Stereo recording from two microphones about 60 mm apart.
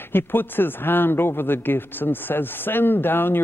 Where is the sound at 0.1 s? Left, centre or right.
Left.